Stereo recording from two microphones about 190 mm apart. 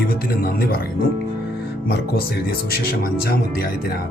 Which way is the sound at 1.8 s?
55° left (ahead or behind).